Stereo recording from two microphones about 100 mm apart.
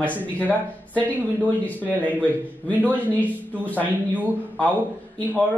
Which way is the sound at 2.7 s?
20° right (ahead or behind).